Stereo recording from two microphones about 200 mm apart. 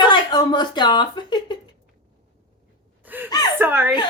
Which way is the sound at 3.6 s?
10° right (ahead or behind).